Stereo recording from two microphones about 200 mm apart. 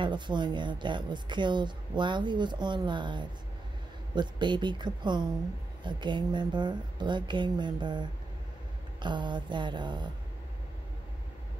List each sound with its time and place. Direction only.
0.0 s speech: 20° right (ahead or behind)